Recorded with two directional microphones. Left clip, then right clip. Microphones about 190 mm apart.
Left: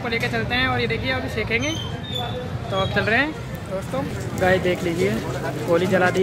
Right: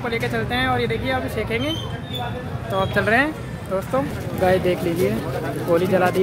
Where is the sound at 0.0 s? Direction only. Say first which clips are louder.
Even; 15° right (ahead or behind).